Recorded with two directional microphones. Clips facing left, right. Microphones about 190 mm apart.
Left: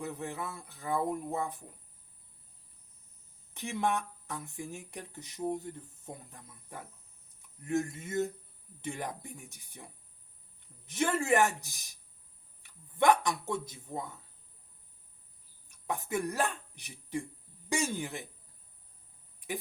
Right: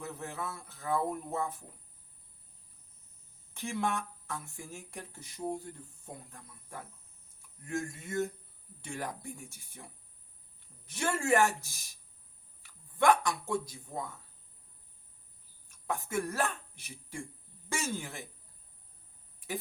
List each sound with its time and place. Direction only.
0.0 s speech: 15° left (ahead or behind)
3.5 s speech: 20° left (ahead or behind)
7.7 s speech: 20° left (ahead or behind)
10.8 s speech: 20° left (ahead or behind)
13.0 s speech: 20° left (ahead or behind)
15.9 s speech: 20° left (ahead or behind)